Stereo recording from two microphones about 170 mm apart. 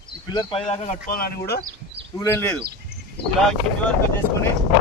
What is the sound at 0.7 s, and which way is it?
Speech, 50° left (ahead or behind).